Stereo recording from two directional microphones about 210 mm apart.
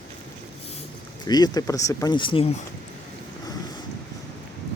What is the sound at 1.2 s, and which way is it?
Speech, 20° left (ahead or behind).